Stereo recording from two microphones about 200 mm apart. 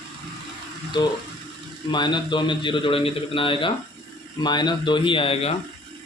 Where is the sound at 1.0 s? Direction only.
20° left (ahead or behind).